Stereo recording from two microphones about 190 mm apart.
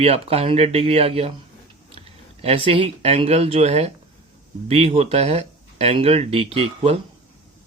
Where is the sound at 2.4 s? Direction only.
30° right (ahead or behind).